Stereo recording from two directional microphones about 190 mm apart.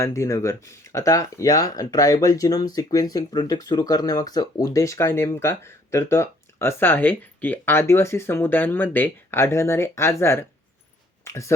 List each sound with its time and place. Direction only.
0.0 s speech: 15° left (ahead or behind)